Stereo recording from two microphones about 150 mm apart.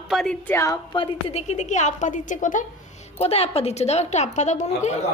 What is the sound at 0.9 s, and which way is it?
A woman's voice, 40° left (ahead or behind).